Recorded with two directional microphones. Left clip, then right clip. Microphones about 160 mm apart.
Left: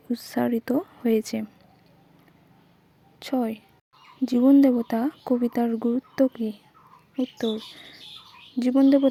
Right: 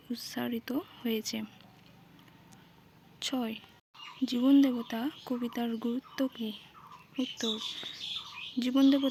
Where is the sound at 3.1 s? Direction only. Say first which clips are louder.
Left 7 dB; 40° left (ahead or behind).